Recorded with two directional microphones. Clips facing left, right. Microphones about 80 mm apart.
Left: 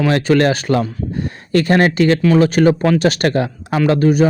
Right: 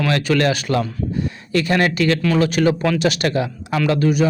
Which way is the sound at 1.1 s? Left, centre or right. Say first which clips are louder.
Left 5 dB; left.